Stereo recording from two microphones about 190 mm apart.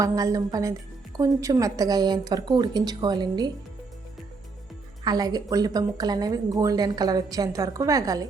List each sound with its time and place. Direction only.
0.0 s a woman's voice: 15° right (ahead or behind)
5.0 s a woman's voice: 20° right (ahead or behind)